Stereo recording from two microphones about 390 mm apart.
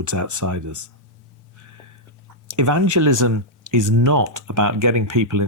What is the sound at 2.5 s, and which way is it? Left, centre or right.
Speech, right.